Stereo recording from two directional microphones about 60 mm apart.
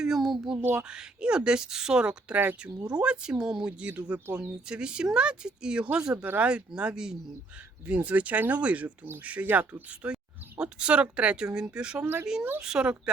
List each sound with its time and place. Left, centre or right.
0.0 s a child's voice: centre
0.9 s speech: centre
3.7 s speech: right
4.4 s speech: centre
7.9 s speech: right